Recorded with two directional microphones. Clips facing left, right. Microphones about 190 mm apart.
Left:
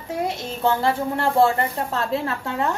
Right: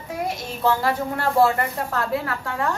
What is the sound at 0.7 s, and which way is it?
A woman's voice, 25° left (ahead or behind).